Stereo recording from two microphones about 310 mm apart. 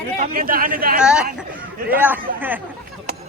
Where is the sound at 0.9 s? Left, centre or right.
Centre.